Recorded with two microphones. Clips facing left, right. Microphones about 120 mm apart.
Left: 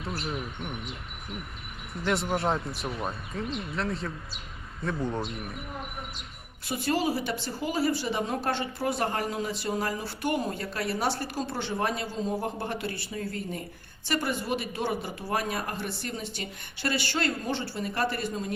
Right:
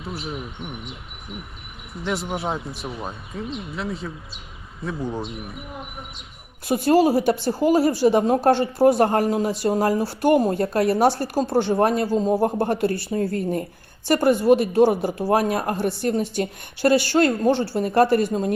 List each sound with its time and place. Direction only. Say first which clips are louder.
0.0 s speech: right 2 dB; centre (ahead or behind)
6.7 s speech: right 10 dB; 45° right (ahead or behind)